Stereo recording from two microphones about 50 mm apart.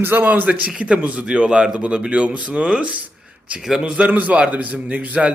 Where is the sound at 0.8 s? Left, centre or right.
Right.